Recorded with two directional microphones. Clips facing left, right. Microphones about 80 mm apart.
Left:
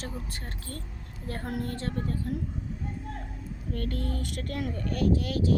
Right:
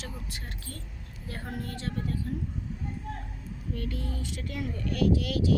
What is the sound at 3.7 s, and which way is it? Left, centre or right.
Speech, left.